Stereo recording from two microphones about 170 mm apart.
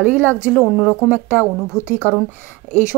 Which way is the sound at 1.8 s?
15° right (ahead or behind).